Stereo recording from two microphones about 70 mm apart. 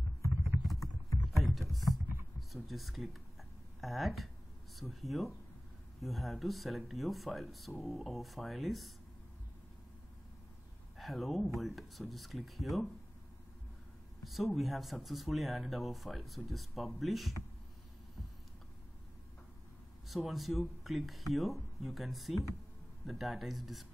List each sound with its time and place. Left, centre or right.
1.3 s rowboat: centre
2.5 s speech: centre
11.0 s speech: centre
14.2 s speech: centre
20.1 s speech: centre